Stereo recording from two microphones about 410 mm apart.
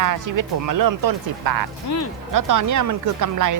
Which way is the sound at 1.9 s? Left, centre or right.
Left.